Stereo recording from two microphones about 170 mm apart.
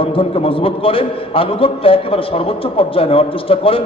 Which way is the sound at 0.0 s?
30° left (ahead or behind).